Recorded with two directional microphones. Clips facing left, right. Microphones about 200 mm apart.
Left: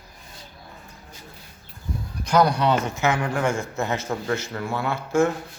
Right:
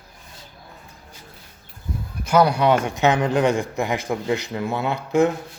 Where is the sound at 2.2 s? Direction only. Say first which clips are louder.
Right 2 dB; 10° right (ahead or behind).